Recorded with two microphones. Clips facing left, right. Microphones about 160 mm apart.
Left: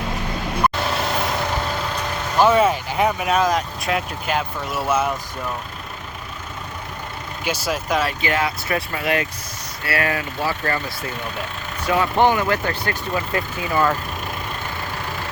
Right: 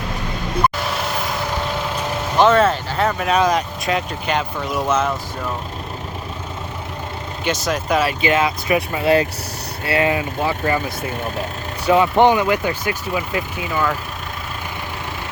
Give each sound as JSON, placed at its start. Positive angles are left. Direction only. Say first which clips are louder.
{"t": 2.4, "sound": "speech", "louder": "right 1 dB", "side_deg": 10}
{"t": 7.4, "sound": "speech", "louder": "right 3 dB", "side_deg": 5}
{"t": 8.2, "sound": "speech", "louder": "right 4 dB", "side_deg": -20}